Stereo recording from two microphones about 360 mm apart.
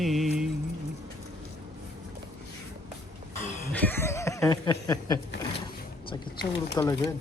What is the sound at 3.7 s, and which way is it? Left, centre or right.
Speech, centre.